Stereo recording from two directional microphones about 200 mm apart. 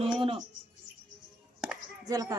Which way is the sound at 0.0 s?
30° right (ahead or behind).